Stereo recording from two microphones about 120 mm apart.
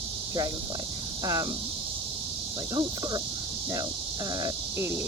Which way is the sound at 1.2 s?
30° right (ahead or behind).